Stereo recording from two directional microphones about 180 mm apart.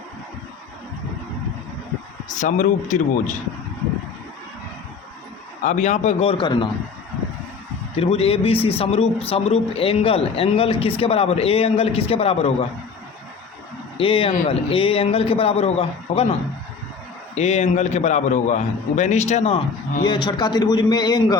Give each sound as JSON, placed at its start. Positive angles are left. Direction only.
{"t": 2.3, "sound": "speech", "side_deg": 45}
{"t": 5.6, "sound": "speech", "side_deg": 40}
{"t": 7.9, "sound": "speech", "side_deg": 35}
{"t": 14.0, "sound": "a man's voice", "side_deg": 30}
{"t": 17.3, "sound": "speech", "side_deg": 40}
{"t": 20.0, "sound": "a man's voice", "side_deg": 25}